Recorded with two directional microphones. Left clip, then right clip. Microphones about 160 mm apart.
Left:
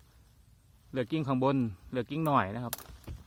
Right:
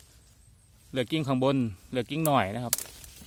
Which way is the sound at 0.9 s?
5° right (ahead or behind).